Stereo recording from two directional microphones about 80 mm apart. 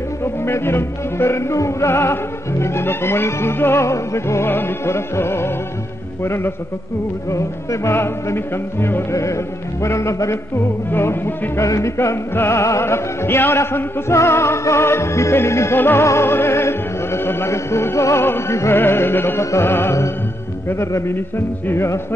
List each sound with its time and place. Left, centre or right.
0.2 s music: left
9.1 s music: left
10.9 s music: left